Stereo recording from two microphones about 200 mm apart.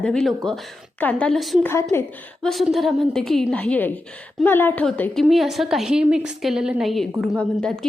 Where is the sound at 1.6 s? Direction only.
10° left (ahead or behind).